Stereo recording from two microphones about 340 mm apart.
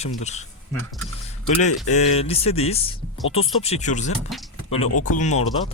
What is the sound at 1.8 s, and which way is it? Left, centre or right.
Speech, centre.